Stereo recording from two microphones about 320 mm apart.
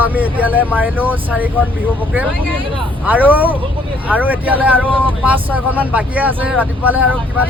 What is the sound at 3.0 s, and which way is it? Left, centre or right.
Speech, centre.